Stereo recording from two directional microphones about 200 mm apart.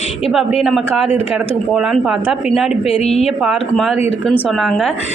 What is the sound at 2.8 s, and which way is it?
Speech, 30° left (ahead or behind).